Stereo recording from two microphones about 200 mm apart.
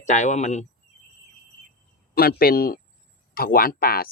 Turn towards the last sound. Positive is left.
turn(degrees=50)  # may be behind; listen again after turning